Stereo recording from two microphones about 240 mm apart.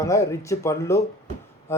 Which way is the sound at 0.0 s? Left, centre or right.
Centre.